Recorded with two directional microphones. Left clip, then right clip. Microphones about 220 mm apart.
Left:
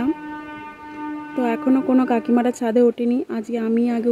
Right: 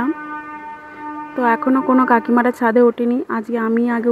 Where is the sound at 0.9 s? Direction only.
5° left (ahead or behind).